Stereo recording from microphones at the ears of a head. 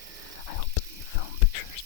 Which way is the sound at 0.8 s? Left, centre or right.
Left.